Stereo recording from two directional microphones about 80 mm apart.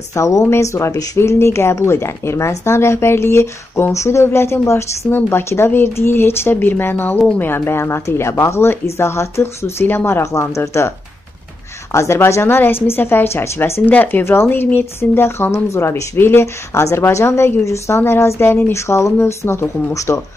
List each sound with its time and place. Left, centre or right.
0.1 s speech: left
11.9 s speech: left
13.8 s speech: left